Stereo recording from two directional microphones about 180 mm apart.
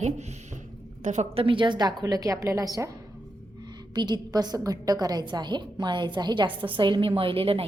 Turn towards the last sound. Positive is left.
turn(degrees=-30)  # may be behind; listen again after turning